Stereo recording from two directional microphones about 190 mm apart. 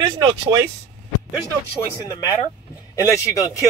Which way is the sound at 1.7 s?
15° left (ahead or behind).